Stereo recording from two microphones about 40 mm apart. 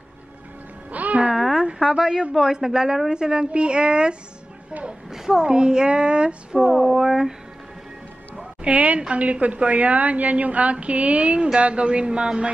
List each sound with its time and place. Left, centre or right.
0.9 s music: right
1.3 s a sound: centre
1.8 s a woman's voice: centre
5.1 s a woman's voice: centre
6.7 s speech: centre
7.0 s a woman's voice: centre
8.6 s a woman's voice: right